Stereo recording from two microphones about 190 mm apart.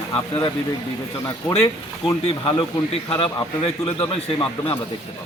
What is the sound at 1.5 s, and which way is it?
A man's voice, 20° left (ahead or behind).